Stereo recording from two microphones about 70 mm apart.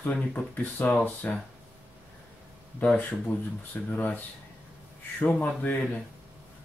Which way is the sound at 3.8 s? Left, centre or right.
Left.